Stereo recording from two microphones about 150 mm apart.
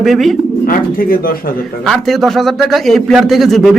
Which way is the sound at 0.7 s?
70° left (ahead or behind).